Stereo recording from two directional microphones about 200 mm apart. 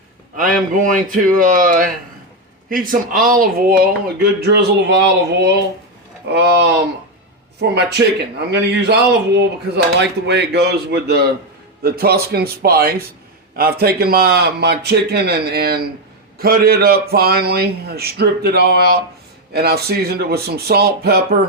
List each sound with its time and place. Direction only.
0.3 s a man's voice: 45° right (ahead or behind)